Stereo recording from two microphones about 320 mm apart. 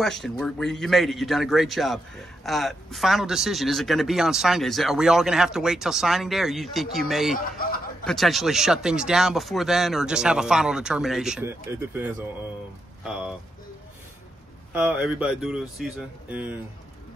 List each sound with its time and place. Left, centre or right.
0.0 s a man's voice: centre
7.3 s a man's voice: left
8.0 s a man's voice: centre
14.7 s a man's voice: centre